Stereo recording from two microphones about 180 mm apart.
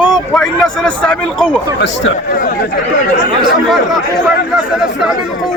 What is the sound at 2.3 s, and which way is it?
Speech, 50° left (ahead or behind).